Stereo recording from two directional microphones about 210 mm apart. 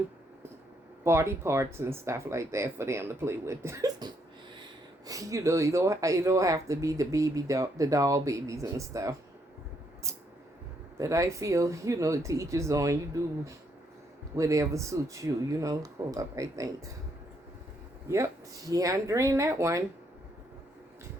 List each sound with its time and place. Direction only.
1.0 s speech: 10° right (ahead or behind)
10.9 s speech: 15° right (ahead or behind)
18.1 s speech: 15° right (ahead or behind)